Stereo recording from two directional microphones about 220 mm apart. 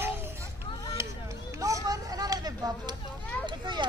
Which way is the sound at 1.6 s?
15° right (ahead or behind).